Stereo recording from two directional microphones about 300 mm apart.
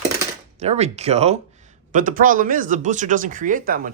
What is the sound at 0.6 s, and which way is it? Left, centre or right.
Speech, right.